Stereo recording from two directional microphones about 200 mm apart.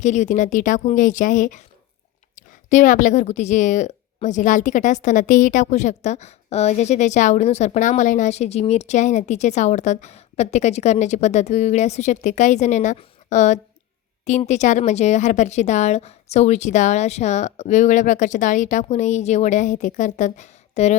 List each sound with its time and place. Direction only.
0.0 s a woman's voice: 35° left (ahead or behind)